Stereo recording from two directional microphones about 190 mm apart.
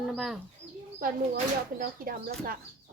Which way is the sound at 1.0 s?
50° right (ahead or behind).